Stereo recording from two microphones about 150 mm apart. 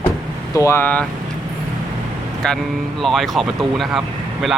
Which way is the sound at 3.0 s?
Centre (ahead or behind).